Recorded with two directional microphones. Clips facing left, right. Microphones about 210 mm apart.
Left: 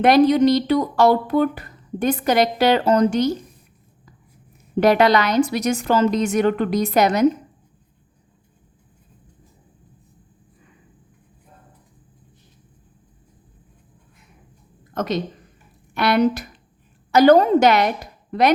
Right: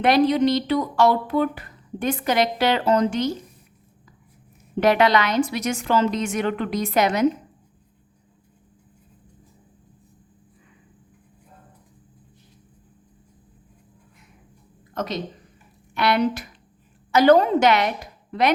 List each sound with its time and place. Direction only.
0.0 s speech: 45° left (ahead or behind)
4.8 s speech: 40° left (ahead or behind)
14.9 s a woman's voice: 50° left (ahead or behind)